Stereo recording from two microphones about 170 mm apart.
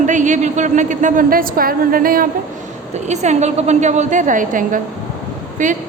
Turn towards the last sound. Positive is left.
turn(degrees=-50)  # may be behind; listen again after turning